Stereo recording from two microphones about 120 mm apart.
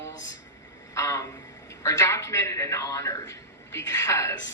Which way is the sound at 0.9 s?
25° left (ahead or behind).